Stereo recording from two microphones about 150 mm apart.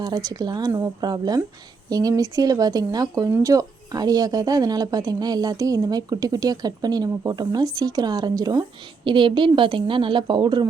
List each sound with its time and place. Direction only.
0.0 s a woman's voice: 25° right (ahead or behind)